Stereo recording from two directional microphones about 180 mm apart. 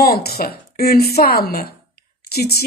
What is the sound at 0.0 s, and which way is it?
A woman's voice, 60° left (ahead or behind).